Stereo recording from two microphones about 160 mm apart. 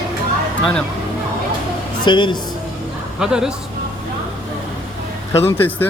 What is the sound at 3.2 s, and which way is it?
Speech, 5° right (ahead or behind).